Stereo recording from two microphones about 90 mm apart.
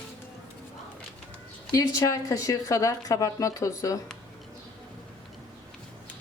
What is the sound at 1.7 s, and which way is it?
Speech, 40° left (ahead or behind).